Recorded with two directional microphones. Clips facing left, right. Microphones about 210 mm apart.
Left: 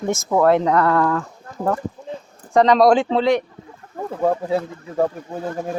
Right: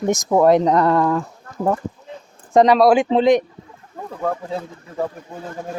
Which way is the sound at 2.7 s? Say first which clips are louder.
Even; 5° right (ahead or behind).